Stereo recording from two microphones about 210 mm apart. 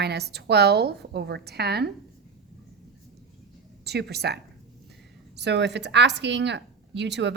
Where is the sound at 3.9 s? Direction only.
50° right (ahead or behind).